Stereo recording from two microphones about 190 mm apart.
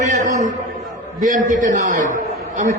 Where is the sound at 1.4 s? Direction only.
40° right (ahead or behind).